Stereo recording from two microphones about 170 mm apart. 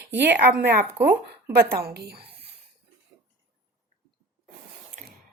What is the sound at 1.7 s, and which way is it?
Speech, 70° right (ahead or behind).